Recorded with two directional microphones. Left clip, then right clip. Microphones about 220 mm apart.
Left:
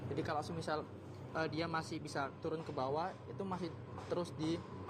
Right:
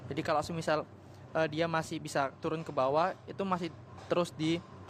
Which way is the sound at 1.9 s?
35° right (ahead or behind).